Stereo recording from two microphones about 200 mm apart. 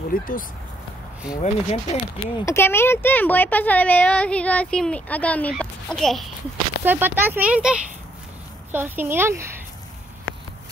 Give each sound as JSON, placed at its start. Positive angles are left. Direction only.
{"t": 0.1, "sound": "speech", "side_deg": 45}
{"t": 1.3, "sound": "speech", "side_deg": 35}
{"t": 2.3, "sound": "speech", "side_deg": 15}
{"t": 6.8, "sound": "speech", "side_deg": -10}